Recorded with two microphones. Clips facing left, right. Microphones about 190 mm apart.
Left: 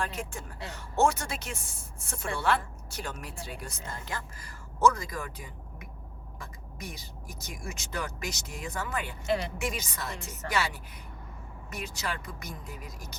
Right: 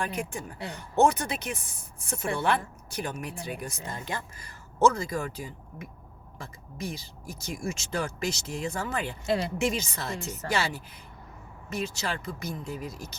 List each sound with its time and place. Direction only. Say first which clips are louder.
0.0 s speech: right 3 dB; 15° right (ahead or behind)